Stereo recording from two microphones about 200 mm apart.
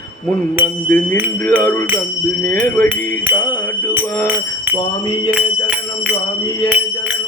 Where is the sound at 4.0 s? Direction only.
10° right (ahead or behind).